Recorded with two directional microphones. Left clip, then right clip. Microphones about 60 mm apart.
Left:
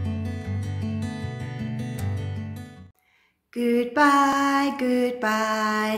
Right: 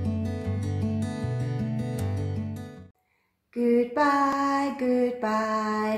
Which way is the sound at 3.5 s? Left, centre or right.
Right.